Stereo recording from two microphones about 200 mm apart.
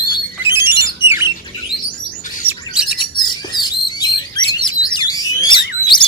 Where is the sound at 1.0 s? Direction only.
10° right (ahead or behind).